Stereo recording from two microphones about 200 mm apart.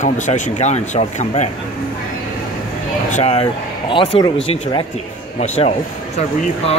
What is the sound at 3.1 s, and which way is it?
Speech, 35° left (ahead or behind).